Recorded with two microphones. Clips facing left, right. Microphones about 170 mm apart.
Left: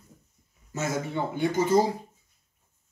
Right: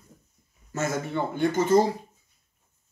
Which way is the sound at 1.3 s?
10° left (ahead or behind).